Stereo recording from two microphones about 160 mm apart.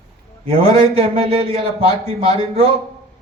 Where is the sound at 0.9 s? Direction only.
40° right (ahead or behind).